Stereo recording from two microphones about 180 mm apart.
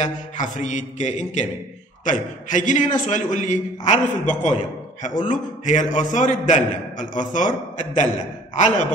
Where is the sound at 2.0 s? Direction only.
45° left (ahead or behind).